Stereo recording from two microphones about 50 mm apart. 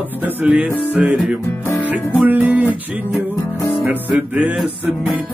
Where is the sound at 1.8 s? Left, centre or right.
Right.